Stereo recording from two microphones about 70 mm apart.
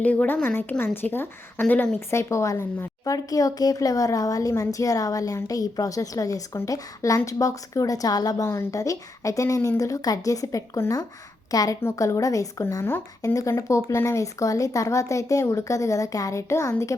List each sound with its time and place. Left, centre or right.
0.0 s a woman's voice: left
2.0 s a woman's voice: left
8.4 s a woman's voice: left
8.8 s a woman's voice: left